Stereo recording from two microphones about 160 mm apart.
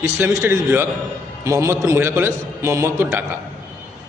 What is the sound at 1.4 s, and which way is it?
A man's voice, 20° right (ahead or behind).